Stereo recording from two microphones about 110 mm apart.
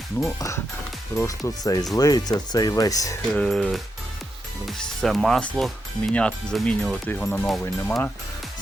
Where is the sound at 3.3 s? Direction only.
5° left (ahead or behind).